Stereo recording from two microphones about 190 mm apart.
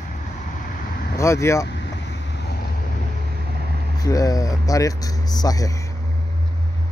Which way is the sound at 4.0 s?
20° left (ahead or behind).